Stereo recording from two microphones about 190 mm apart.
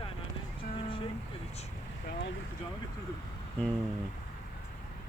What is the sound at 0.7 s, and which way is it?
Music, 30° left (ahead or behind).